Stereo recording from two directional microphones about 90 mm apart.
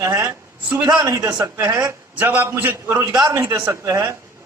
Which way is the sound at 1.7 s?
20° right (ahead or behind).